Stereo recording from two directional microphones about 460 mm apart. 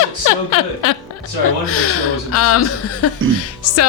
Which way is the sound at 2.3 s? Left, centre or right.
Left.